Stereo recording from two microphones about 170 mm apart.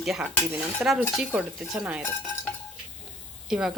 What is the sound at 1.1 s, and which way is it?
Stir, 5° right (ahead or behind).